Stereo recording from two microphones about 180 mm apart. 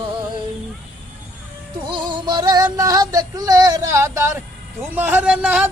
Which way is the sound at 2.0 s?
25° right (ahead or behind).